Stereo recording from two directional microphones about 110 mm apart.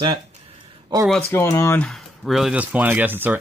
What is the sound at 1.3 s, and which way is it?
Speech, 25° left (ahead or behind).